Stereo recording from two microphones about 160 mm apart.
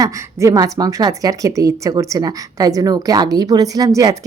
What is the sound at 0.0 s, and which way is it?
A woman's voice, 20° right (ahead or behind).